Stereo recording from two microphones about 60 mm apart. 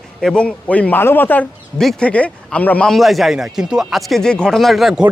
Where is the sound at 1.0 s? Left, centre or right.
Left.